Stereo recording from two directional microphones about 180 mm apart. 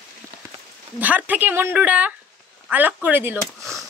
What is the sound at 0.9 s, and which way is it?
Speech, 10° right (ahead or behind).